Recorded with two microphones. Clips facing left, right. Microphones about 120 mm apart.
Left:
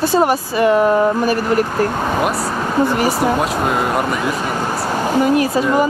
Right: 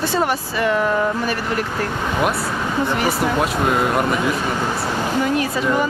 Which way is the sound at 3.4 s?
Centre (ahead or behind).